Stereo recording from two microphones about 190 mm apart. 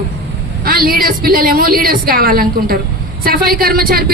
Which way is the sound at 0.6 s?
50° right (ahead or behind).